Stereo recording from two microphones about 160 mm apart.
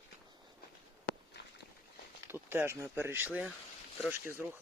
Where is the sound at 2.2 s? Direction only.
15° right (ahead or behind).